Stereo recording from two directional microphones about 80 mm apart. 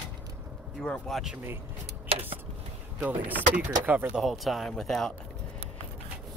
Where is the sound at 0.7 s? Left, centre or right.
Centre.